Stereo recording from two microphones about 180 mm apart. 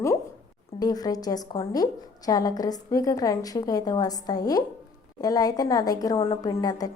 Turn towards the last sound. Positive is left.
turn(degrees=20)  # may be behind; listen again after turning